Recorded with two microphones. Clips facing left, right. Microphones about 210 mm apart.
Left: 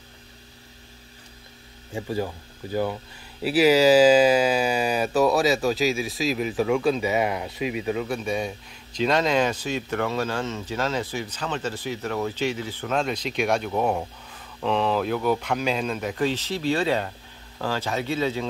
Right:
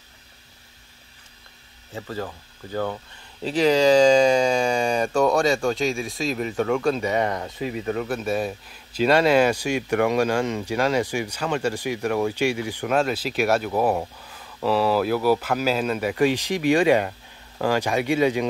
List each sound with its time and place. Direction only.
1.9 s speech: 15° left (ahead or behind)
8.0 s speech: 5° right (ahead or behind)